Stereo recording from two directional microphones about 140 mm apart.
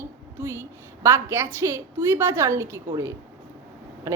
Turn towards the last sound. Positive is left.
turn(degrees=-20)  # may be behind; listen again after turning